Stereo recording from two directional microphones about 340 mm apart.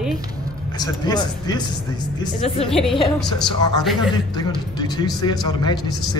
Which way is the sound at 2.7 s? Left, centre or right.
Centre.